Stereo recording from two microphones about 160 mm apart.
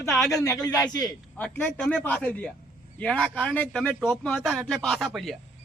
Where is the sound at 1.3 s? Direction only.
10° left (ahead or behind).